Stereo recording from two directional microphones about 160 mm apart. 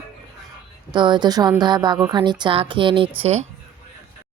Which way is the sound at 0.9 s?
30° right (ahead or behind).